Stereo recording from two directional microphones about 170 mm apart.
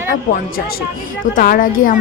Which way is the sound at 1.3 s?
55° left (ahead or behind).